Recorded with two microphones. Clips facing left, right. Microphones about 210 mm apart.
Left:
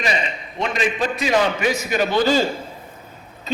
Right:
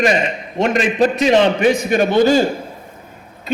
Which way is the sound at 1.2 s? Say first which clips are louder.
Right 5 dB; 25° right (ahead or behind).